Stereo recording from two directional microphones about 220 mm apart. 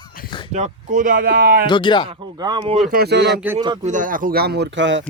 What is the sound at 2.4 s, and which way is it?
Speech, 20° right (ahead or behind).